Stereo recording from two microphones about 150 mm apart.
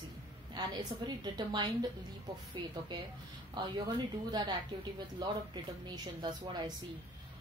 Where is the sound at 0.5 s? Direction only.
30° right (ahead or behind).